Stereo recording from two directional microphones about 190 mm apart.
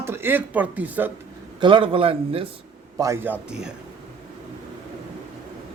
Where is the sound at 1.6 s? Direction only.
25° right (ahead or behind).